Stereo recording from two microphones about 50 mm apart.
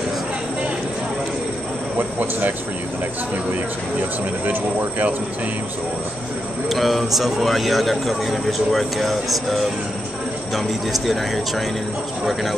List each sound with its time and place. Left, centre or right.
2.0 s speech: right
4.5 s speech: right
6.7 s a man's voice: centre